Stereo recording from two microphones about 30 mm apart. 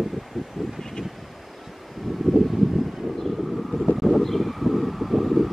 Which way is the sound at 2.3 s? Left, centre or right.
Centre.